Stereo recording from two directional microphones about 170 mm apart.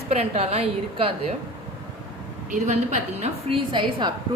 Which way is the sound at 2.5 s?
45° right (ahead or behind).